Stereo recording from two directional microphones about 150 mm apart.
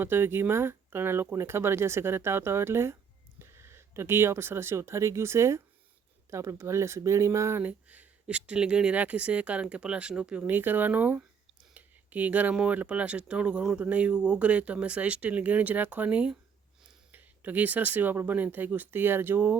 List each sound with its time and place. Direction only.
0.0 s speech: 15° right (ahead or behind)